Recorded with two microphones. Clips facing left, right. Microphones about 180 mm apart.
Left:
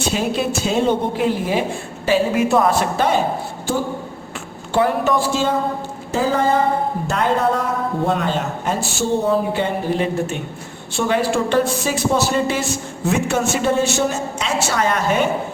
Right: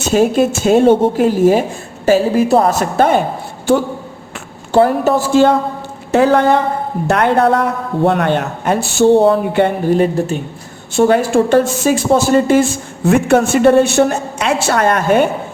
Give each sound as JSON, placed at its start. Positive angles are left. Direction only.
{"t": 0.1, "sound": "a woman's voice", "side_deg": -45}
{"t": 4.7, "sound": "a woman's voice", "side_deg": -40}
{"t": 5.3, "sound": "a man's voice", "side_deg": -60}